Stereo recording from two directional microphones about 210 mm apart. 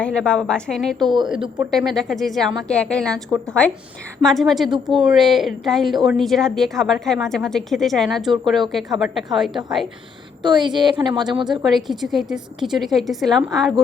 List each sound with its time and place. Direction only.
0.0 s a woman's voice: 5° left (ahead or behind)
0.9 s a woman's voice: 20° right (ahead or behind)
1.5 s a woman's voice: centre (ahead or behind)
4.7 s a woman's voice: 20° right (ahead or behind)
5.0 s a woman's voice: centre (ahead or behind)
10.4 s a woman's voice: 20° right (ahead or behind)
11.7 s a woman's voice: centre (ahead or behind)